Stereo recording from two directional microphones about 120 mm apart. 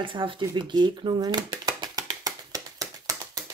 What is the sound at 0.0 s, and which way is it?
Speech, 45° right (ahead or behind).